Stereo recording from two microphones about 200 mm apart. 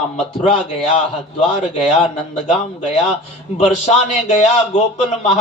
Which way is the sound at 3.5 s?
35° left (ahead or behind).